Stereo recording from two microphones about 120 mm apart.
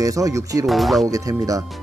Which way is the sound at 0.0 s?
30° right (ahead or behind).